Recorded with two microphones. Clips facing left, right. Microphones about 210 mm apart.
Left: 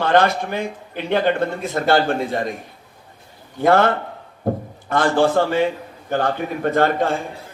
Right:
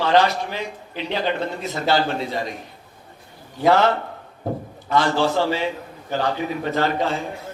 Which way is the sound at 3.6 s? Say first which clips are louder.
Left 2 dB; 50° left (ahead or behind).